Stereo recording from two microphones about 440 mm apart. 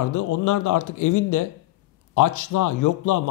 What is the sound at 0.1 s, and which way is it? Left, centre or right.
A man's voice, left.